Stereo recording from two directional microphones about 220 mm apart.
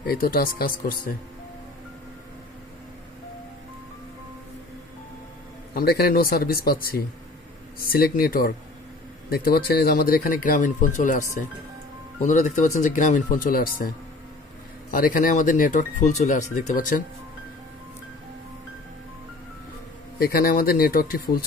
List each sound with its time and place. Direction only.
0.0 s speech: 40° left (ahead or behind)
5.8 s speech: 45° left (ahead or behind)
20.2 s speech: 40° left (ahead or behind)